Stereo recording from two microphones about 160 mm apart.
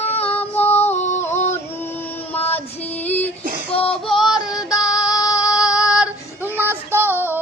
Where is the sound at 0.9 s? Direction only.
45° left (ahead or behind).